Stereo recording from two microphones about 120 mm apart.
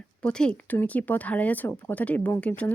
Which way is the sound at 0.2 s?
10° left (ahead or behind).